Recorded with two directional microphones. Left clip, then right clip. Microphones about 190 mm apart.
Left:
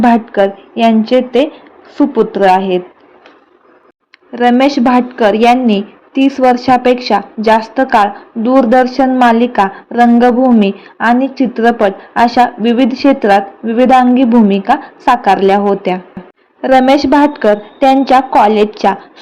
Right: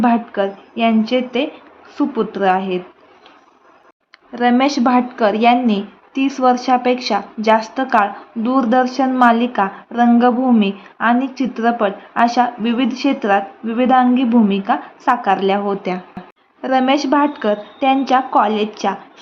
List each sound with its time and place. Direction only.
0.0 s a woman's voice: 20° left (ahead or behind)
4.3 s a woman's voice: 15° left (ahead or behind)